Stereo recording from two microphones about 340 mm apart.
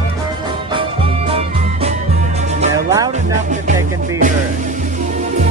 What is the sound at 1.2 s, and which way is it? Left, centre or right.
Music, centre.